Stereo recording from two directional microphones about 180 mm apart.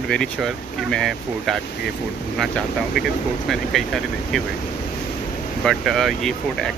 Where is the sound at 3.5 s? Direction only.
Centre (ahead or behind).